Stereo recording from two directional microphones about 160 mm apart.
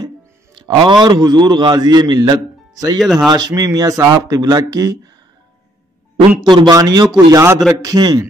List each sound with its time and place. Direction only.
0.6 s a man's voice: 30° right (ahead or behind)
3.0 s speech: centre (ahead or behind)
3.3 s a man's voice: 25° right (ahead or behind)
6.4 s a man's voice: 25° right (ahead or behind)